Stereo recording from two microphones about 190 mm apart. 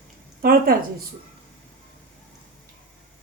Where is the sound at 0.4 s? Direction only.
50° right (ahead or behind).